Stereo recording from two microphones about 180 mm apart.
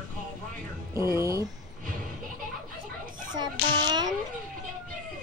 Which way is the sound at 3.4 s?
25° right (ahead or behind).